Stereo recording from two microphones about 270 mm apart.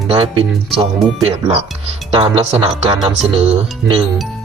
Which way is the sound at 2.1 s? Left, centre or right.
Centre.